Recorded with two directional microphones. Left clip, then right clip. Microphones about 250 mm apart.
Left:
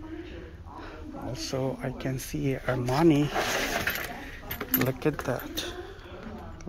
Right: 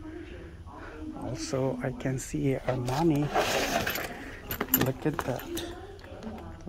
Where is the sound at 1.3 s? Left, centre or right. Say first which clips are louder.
Right 1 dB; centre.